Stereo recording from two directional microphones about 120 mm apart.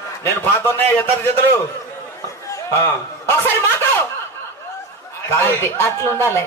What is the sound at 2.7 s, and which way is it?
Speech, 25° left (ahead or behind).